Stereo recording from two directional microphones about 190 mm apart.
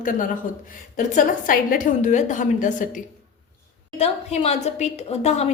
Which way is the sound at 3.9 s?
30° left (ahead or behind).